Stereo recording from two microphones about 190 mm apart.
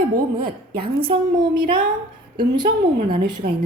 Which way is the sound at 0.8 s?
25° right (ahead or behind).